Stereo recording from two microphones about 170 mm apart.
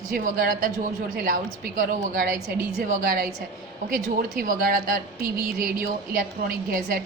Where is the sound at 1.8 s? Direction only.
55° right (ahead or behind).